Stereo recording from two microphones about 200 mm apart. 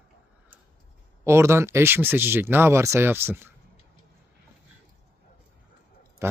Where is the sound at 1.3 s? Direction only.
15° right (ahead or behind).